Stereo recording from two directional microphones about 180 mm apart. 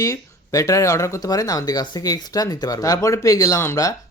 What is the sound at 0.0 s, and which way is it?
Speech, 15° left (ahead or behind).